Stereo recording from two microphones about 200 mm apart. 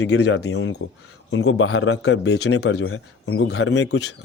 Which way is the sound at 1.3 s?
75° left (ahead or behind).